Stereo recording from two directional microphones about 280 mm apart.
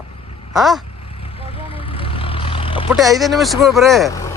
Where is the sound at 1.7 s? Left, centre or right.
Centre.